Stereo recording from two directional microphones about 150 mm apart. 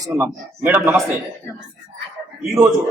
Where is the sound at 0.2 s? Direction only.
10° right (ahead or behind).